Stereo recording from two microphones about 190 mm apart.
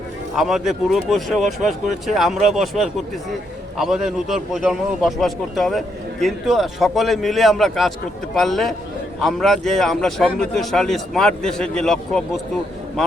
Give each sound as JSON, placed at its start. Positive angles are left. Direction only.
{"t": 0.3, "sound": "a man's voice", "side_deg": 0}